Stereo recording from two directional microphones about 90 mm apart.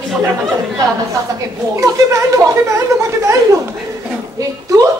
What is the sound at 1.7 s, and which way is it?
Speech, 35° right (ahead or behind).